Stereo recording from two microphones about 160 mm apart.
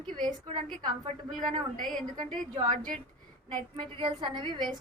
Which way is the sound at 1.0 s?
55° right (ahead or behind).